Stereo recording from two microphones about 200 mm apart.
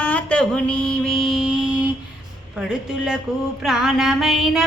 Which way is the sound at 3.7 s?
Centre (ahead or behind).